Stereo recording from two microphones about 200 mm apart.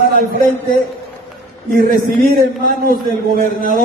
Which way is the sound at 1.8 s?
50° right (ahead or behind).